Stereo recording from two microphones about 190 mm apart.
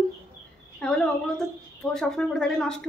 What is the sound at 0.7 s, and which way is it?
A woman's voice, 5° left (ahead or behind).